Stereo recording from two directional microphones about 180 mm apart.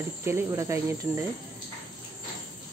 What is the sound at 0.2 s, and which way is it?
Speech, 15° right (ahead or behind).